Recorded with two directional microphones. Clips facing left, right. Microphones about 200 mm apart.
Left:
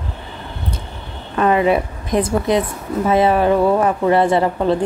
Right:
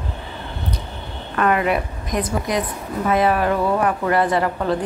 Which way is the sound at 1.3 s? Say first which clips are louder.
Left 4 dB; 25° left (ahead or behind).